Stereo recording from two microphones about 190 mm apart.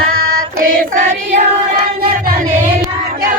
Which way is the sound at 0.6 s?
45° right (ahead or behind).